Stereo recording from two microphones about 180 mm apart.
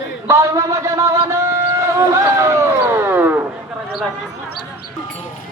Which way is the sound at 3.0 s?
10° right (ahead or behind).